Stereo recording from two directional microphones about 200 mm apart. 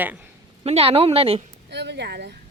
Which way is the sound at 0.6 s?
30° right (ahead or behind).